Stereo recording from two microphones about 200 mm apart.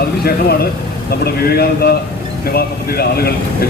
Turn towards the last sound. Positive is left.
turn(degrees=50)  # may be behind; listen again after turning